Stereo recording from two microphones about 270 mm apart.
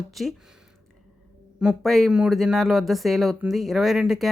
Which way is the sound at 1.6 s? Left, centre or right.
Centre.